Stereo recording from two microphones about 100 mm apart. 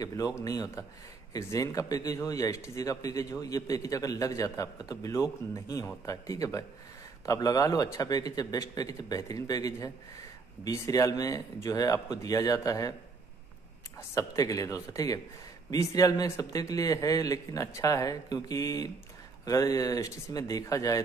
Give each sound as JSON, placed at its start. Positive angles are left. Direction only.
{"t": 0.0, "sound": "speech", "side_deg": 35}
{"t": 13.9, "sound": "speech", "side_deg": 35}